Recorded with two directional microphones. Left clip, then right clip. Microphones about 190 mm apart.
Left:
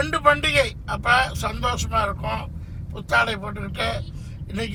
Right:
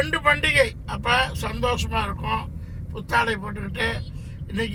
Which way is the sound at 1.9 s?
30° left (ahead or behind).